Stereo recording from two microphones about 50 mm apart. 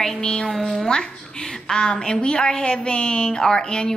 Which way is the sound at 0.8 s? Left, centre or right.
Centre.